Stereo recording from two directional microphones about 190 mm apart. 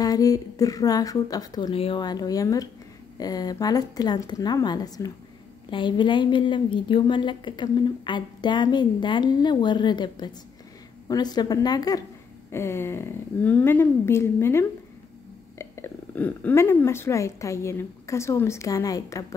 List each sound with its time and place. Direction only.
0.0 s a woman's voice: 20° left (ahead or behind)